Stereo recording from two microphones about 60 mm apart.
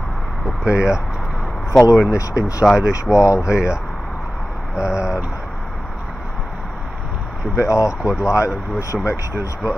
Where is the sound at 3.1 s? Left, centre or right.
Left.